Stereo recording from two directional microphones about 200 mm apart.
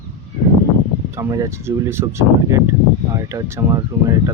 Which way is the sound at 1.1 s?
15° right (ahead or behind).